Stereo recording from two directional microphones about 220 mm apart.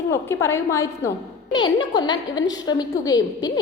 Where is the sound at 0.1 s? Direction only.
10° left (ahead or behind).